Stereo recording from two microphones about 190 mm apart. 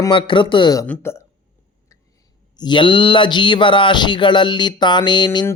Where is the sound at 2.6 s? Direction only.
25° left (ahead or behind).